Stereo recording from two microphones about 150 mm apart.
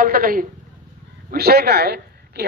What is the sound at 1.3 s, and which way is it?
Speech, 90° right.